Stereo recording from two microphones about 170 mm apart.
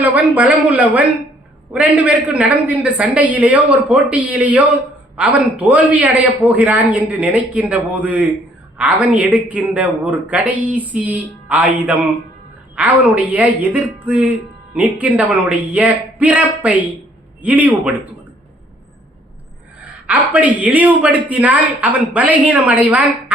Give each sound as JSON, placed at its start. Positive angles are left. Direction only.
{"t": 0.0, "sound": "a man's voice", "side_deg": -10}
{"t": 19.8, "sound": "a man's voice", "side_deg": -10}